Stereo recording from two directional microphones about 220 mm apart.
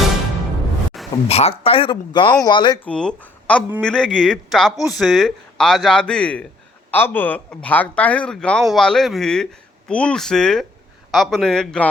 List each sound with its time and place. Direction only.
0.9 s a sound: centre (ahead or behind)
1.3 s speech: 30° left (ahead or behind)
2.8 s speech: 5° left (ahead or behind)